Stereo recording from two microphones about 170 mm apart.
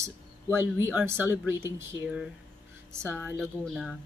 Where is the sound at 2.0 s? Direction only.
5° right (ahead or behind).